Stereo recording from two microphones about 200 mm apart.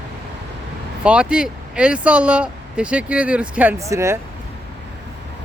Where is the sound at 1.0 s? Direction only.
5° right (ahead or behind).